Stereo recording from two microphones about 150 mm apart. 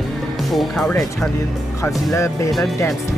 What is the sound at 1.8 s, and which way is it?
Speech, 20° left (ahead or behind).